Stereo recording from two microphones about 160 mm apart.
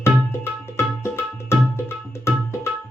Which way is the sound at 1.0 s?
15° left (ahead or behind).